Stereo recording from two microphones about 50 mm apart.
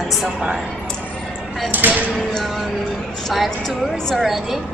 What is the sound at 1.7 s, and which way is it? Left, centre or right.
Speech, right.